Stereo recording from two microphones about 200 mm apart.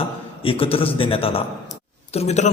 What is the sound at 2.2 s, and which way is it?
Mantra, 35° left (ahead or behind).